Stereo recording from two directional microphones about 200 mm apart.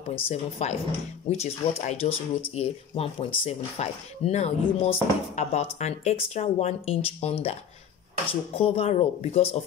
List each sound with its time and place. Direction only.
0.1 s speech: 35° left (ahead or behind)